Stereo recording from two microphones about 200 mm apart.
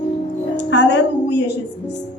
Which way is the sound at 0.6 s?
65° left (ahead or behind).